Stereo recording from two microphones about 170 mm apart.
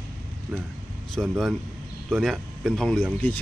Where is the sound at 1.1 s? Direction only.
Centre (ahead or behind).